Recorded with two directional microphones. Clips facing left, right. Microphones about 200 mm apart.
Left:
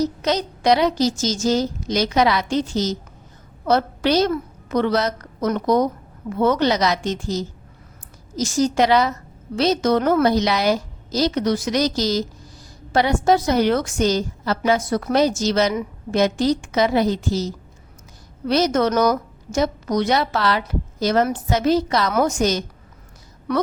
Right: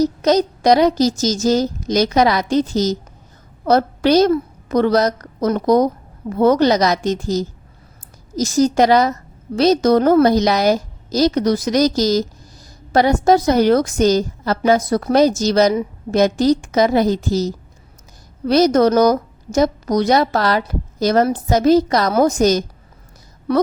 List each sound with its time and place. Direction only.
0.0 s a woman's voice: 40° right (ahead or behind)